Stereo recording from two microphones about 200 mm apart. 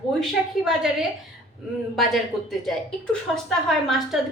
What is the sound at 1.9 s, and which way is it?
A woman's voice, centre (ahead or behind).